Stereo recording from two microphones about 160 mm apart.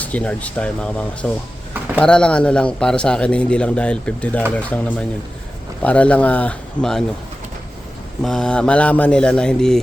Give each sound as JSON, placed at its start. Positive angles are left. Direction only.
{"t": 0.0, "sound": "speech", "side_deg": 10}
{"t": 8.2, "sound": "speech", "side_deg": 0}